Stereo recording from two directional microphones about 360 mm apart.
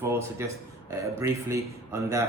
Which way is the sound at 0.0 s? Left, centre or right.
Centre.